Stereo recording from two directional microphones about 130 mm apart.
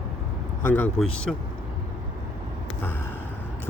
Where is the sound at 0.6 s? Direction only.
15° left (ahead or behind).